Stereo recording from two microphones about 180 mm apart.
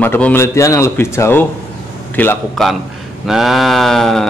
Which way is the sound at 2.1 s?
5° left (ahead or behind).